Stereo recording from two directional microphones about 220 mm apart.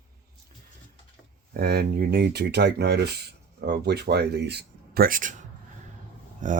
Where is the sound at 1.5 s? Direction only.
45° right (ahead or behind).